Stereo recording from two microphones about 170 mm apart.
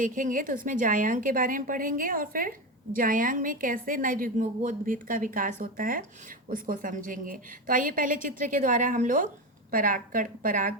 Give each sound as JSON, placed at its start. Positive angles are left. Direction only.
{"t": 0.0, "sound": "a woman's voice", "side_deg": -50}